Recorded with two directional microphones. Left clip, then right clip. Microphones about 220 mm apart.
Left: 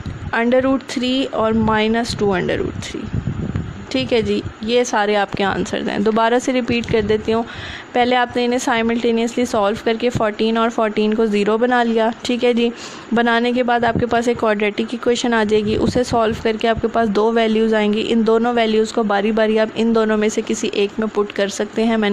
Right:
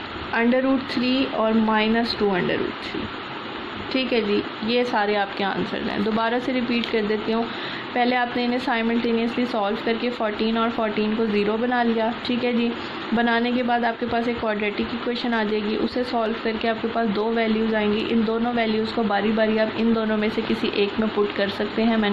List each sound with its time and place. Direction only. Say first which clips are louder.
0.3 s a woman's voice: left 5 dB; 50° left (ahead or behind)
4.7 s a woman's voice: left 6 dB; 45° left (ahead or behind)